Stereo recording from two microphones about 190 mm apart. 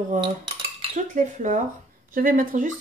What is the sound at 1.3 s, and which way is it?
Speech, 40° right (ahead or behind).